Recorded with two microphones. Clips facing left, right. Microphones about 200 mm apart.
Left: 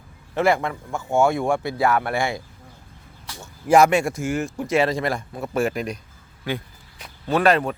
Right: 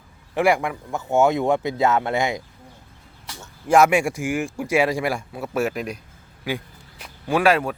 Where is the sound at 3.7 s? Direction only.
Centre (ahead or behind).